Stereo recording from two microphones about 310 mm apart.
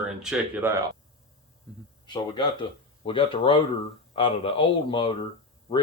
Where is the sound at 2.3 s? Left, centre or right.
Centre.